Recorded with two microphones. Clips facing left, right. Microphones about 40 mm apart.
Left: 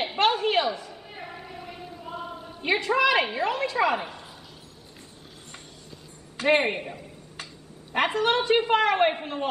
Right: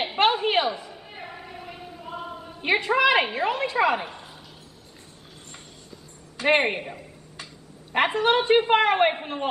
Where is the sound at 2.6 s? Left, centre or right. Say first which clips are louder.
Right 2 dB; right.